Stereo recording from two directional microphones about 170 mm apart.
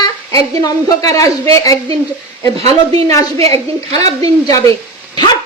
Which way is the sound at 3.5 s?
20° left (ahead or behind).